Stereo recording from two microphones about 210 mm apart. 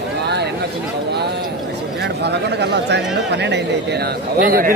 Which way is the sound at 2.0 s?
55° right (ahead or behind).